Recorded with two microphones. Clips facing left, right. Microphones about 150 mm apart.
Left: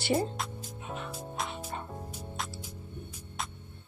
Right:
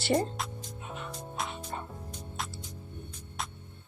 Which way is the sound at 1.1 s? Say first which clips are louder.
Right 2 dB; centre (ahead or behind).